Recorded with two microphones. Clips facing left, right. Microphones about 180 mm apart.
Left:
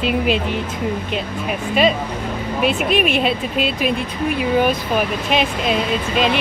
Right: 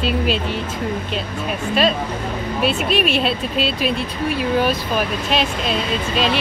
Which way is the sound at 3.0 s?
15° left (ahead or behind).